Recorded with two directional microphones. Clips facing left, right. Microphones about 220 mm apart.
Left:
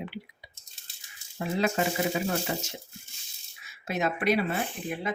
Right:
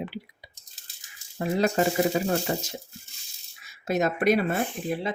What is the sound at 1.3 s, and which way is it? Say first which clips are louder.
Speech: right 4 dB; 40° right (ahead or behind).